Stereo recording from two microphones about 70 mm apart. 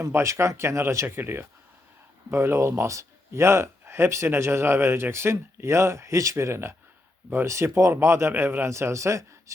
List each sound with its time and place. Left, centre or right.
0.0 s speech: right